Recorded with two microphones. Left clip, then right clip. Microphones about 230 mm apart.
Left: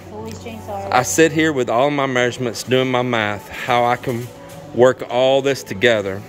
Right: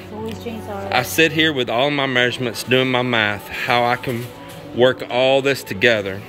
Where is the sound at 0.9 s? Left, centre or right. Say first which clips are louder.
Left 2 dB; centre.